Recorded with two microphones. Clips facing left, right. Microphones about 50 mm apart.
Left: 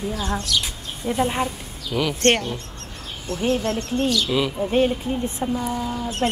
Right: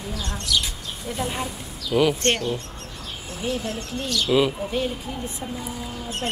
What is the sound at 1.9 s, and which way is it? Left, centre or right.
Speech, centre.